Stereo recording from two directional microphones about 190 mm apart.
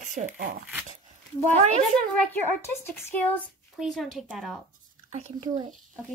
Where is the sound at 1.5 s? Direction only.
35° right (ahead or behind).